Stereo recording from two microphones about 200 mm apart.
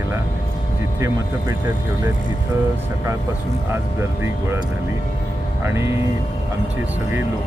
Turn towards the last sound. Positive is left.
turn(degrees=-15)  # may be behind; listen again after turning